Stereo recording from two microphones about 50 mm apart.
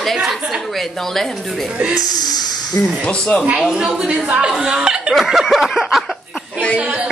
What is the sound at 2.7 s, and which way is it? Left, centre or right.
Speech, left.